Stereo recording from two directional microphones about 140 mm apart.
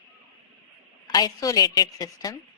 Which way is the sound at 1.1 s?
30° left (ahead or behind).